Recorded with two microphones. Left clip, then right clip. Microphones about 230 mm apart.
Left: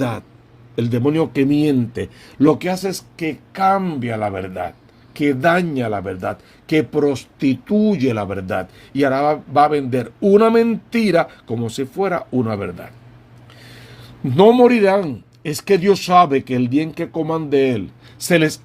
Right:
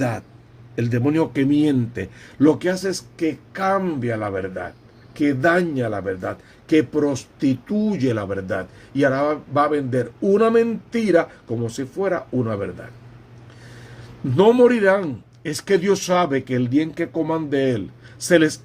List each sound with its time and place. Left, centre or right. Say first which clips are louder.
0.8 s speech: left 2 dB; centre; by 12.6 s left
14.3 s speech: left 3 dB; left